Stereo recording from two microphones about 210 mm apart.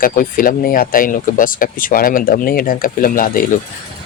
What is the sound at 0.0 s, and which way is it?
Speech, 40° left (ahead or behind).